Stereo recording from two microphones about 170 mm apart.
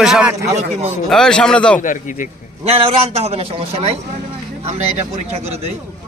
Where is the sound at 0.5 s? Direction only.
40° right (ahead or behind).